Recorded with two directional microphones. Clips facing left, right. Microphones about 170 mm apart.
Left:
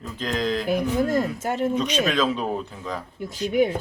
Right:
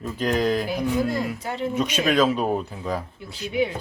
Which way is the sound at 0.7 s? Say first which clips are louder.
Left 2 dB; 45° left (ahead or behind).